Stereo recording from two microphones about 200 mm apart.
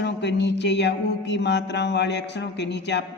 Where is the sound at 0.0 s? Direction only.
60° left (ahead or behind).